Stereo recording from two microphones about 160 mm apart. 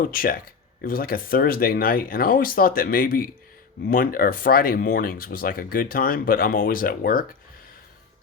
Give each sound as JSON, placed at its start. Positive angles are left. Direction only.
{"t": 0.1, "sound": "speech", "side_deg": 65}